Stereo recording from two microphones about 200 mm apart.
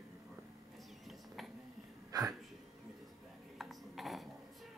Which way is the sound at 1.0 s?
Centre (ahead or behind).